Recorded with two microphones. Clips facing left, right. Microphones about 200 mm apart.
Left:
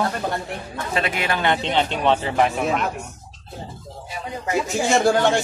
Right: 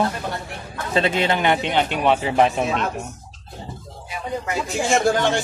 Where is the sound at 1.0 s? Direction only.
25° right (ahead or behind); by 2.3 s 10° right (ahead or behind).